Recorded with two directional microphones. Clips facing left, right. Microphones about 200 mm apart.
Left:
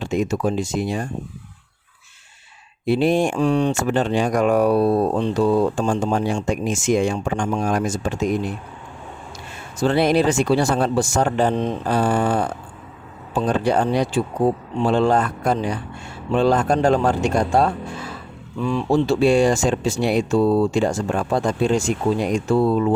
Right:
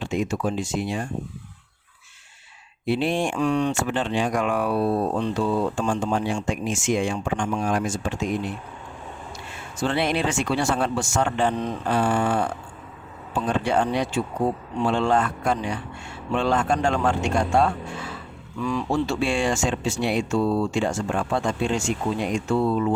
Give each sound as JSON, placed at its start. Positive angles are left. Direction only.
{"t": 0.0, "sound": "speech", "side_deg": 40}
{"t": 2.8, "sound": "speech", "side_deg": 40}
{"t": 9.8, "sound": "speech", "side_deg": 40}